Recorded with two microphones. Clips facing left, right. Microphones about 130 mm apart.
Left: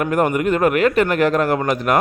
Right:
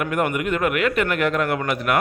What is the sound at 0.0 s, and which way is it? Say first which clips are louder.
A man's voice: left 5 dB; 35° left (ahead or behind).